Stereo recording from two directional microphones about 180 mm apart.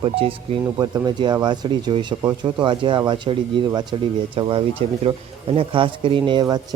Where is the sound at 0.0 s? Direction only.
30° right (ahead or behind).